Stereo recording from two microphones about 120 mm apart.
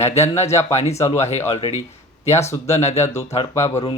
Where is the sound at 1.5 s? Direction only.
60° left (ahead or behind).